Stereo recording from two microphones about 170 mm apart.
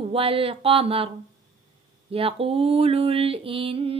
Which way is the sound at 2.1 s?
35° right (ahead or behind).